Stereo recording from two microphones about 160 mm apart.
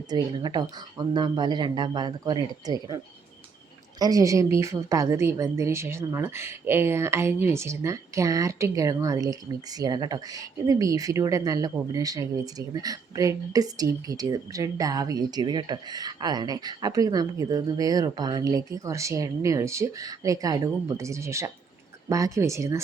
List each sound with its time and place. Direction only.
0.1 s a woman's voice: 25° right (ahead or behind)